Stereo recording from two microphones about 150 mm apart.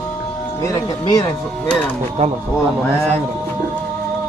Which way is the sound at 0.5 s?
20° left (ahead or behind).